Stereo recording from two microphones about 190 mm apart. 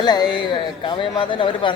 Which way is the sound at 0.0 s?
20° left (ahead or behind).